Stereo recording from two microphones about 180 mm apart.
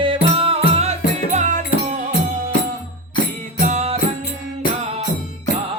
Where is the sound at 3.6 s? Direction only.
40° right (ahead or behind).